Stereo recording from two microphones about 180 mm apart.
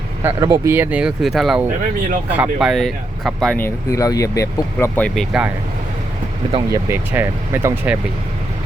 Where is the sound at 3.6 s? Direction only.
15° left (ahead or behind); by 5.4 s centre (ahead or behind).